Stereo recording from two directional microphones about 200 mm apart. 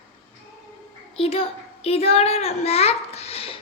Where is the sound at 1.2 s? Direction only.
30° left (ahead or behind).